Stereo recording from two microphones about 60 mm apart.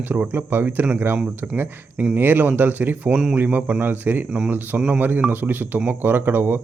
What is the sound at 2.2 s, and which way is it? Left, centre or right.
A man's voice, right.